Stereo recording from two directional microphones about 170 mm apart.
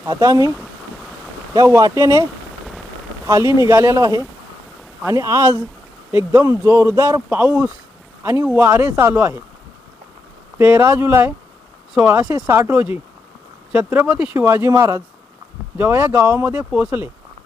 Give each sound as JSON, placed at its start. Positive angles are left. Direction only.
{"t": 0.0, "sound": "speech", "side_deg": -20}
{"t": 1.5, "sound": "speech", "side_deg": -20}
{"t": 3.2, "sound": "speech", "side_deg": -15}
{"t": 10.6, "sound": "speech", "side_deg": -15}